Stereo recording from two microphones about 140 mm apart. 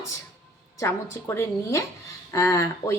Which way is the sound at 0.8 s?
20° left (ahead or behind).